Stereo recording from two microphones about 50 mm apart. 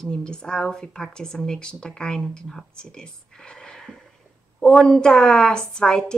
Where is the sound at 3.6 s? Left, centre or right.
Centre.